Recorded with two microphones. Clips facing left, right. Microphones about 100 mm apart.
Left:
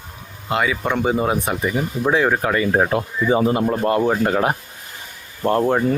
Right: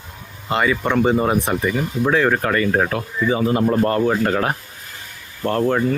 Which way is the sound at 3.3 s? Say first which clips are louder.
Left 2 dB; 30° left (ahead or behind).